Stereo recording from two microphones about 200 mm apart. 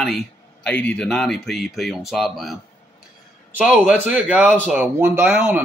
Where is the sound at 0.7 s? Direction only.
5° left (ahead or behind).